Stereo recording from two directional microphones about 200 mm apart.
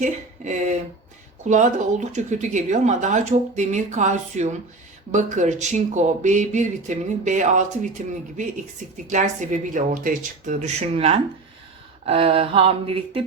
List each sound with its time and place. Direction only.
0.0 s speech: 35° right (ahead or behind)
9.0 s speech: 40° right (ahead or behind)
12.0 s a sound: 30° right (ahead or behind)